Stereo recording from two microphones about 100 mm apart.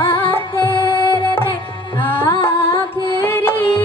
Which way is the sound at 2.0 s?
25° left (ahead or behind).